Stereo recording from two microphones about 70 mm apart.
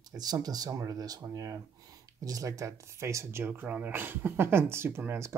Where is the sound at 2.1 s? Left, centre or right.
Right.